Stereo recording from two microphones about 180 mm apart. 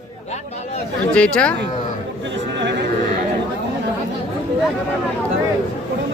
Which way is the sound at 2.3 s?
80° right.